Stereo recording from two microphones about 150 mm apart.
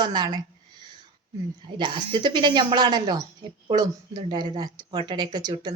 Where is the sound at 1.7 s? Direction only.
30° right (ahead or behind).